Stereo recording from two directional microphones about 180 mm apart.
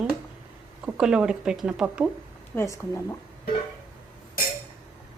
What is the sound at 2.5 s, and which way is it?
Speech, 15° left (ahead or behind).